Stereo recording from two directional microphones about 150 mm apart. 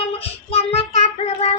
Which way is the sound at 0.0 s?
40° left (ahead or behind).